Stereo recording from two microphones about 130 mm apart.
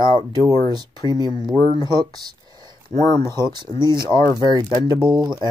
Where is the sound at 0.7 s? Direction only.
30° right (ahead or behind).